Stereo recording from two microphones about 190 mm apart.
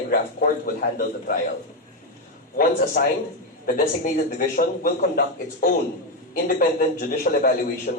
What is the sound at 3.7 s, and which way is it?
A man's voice, 45° left (ahead or behind).